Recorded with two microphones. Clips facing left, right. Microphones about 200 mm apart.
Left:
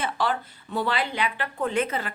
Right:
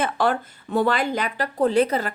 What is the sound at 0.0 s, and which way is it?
A woman's voice, 50° right (ahead or behind).